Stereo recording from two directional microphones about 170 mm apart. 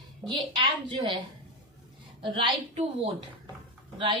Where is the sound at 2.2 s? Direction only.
30° right (ahead or behind).